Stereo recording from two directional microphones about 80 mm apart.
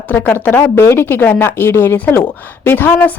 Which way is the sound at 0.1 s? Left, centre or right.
Left.